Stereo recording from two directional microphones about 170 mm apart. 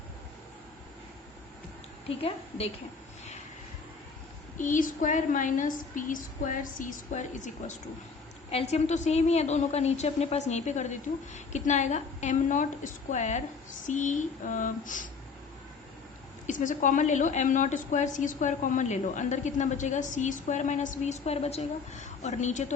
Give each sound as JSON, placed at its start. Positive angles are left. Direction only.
{"t": 2.0, "sound": "a woman's voice", "side_deg": 35}
{"t": 4.5, "sound": "a woman's voice", "side_deg": 50}
{"t": 16.5, "sound": "a woman's voice", "side_deg": 50}